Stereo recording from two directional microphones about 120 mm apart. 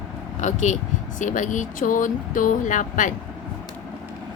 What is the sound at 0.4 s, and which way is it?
Speech, 85° left.